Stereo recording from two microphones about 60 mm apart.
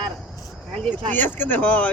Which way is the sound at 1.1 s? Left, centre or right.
Left.